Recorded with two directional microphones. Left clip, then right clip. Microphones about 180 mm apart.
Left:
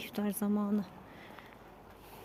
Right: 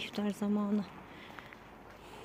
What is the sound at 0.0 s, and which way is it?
Speech, 10° left (ahead or behind).